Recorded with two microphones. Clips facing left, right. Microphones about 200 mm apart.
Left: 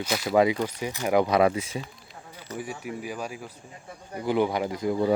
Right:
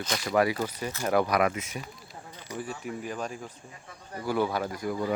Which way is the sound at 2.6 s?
10° left (ahead or behind).